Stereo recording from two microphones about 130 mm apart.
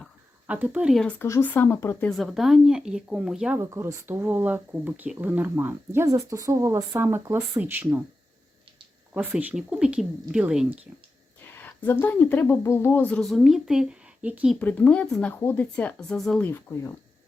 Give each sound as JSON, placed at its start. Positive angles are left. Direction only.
{"t": 0.4, "sound": "speech", "side_deg": -10}
{"t": 1.2, "sound": "speech", "side_deg": 15}
{"t": 2.0, "sound": "speech", "side_deg": 0}
{"t": 3.6, "sound": "speech", "side_deg": -25}
{"t": 9.1, "sound": "speech", "side_deg": -10}
{"t": 11.5, "sound": "speech", "side_deg": 15}
{"t": 13.2, "sound": "speech", "side_deg": 0}
{"t": 14.5, "sound": "speech", "side_deg": 10}
{"t": 16.4, "sound": "speech", "side_deg": 15}